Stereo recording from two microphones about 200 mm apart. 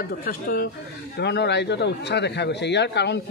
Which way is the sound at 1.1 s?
55° left (ahead or behind).